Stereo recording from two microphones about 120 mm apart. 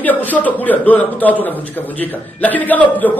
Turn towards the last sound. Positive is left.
turn(degrees=15)  # may be behind; listen again after turning